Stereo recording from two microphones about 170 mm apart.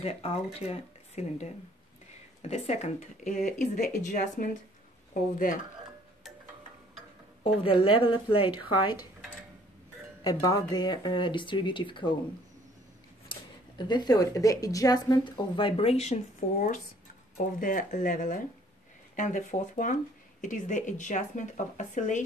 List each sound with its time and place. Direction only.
0.0 s a woman's voice: 35° left (ahead or behind)
7.4 s a woman's voice: 35° left (ahead or behind)
10.2 s speech: 20° left (ahead or behind)
13.3 s speech: 25° left (ahead or behind)
17.6 s speech: 50° left (ahead or behind)